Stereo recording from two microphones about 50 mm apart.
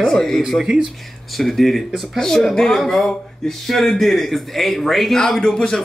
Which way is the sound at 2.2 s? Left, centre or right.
Centre.